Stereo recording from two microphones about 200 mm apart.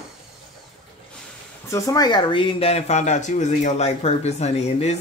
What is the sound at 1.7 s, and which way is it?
Speech, 15° left (ahead or behind).